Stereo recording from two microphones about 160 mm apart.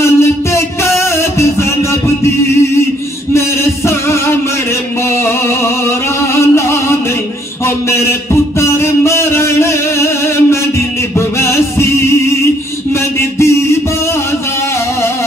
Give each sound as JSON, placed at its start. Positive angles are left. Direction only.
{"t": 0.0, "sound": "music", "side_deg": 15}
{"t": 3.3, "sound": "music", "side_deg": 15}
{"t": 7.6, "sound": "a sound", "side_deg": 15}